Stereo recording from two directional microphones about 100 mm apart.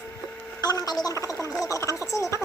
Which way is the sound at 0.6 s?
40° left (ahead or behind).